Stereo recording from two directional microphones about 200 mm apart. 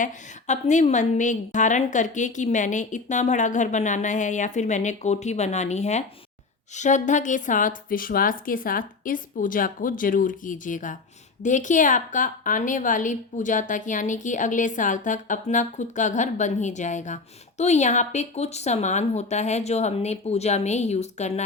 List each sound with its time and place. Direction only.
0.0 s a woman's voice: 35° left (ahead or behind)